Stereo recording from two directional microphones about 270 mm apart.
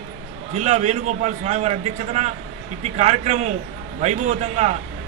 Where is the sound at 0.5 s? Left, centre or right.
Right.